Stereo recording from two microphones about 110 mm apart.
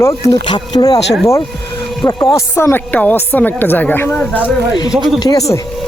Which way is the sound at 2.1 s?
30° left (ahead or behind).